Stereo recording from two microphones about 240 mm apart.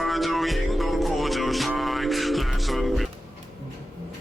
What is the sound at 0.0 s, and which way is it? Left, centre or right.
Music, centre.